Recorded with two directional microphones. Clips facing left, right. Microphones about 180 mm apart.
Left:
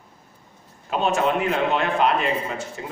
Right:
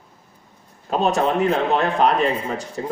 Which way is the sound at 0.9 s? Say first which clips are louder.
Right 2 dB; 35° right (ahead or behind).